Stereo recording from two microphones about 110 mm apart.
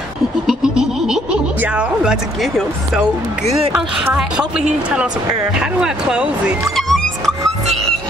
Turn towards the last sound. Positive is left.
turn(degrees=-5)  # may be behind; listen again after turning